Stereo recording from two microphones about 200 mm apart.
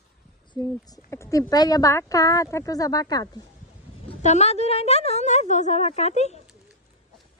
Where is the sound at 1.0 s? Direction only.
15° left (ahead or behind).